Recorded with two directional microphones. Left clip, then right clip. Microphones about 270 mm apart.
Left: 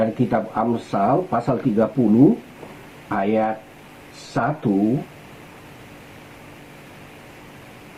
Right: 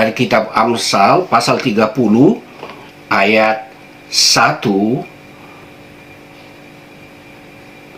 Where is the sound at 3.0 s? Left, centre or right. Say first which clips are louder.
Right 10 dB; centre.